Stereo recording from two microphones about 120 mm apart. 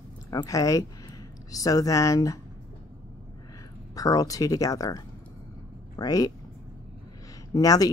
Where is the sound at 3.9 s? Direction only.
30° left (ahead or behind).